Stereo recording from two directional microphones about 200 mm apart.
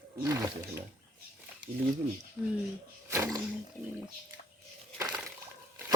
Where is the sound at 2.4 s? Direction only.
10° right (ahead or behind).